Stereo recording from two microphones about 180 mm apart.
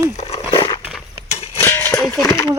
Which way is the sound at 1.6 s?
15° left (ahead or behind).